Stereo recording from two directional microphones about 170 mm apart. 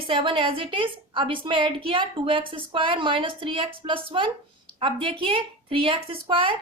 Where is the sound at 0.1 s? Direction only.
30° right (ahead or behind).